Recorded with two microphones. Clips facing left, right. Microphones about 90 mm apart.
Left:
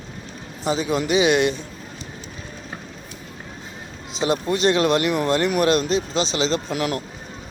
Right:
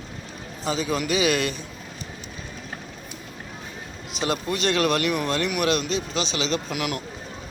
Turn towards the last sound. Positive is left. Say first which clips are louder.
# left 3 dB
turn(degrees=35)  # may be behind; listen again after turning